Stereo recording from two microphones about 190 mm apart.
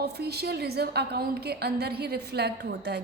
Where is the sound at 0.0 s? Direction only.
60° right (ahead or behind).